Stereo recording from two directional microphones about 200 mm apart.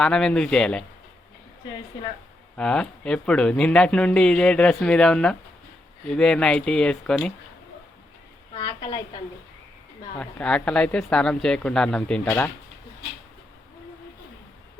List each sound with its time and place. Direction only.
0.0 s speech: 5° left (ahead or behind)
2.6 s speech: 5° left (ahead or behind)
8.5 s a woman's voice: 25° left (ahead or behind)
10.2 s speech: 5° left (ahead or behind)